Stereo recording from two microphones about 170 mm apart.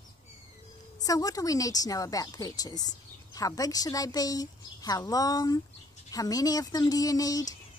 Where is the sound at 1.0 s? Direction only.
20° left (ahead or behind).